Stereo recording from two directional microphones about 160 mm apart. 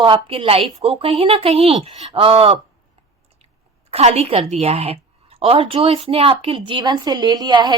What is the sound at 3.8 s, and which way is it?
A woman's voice, 40° right (ahead or behind).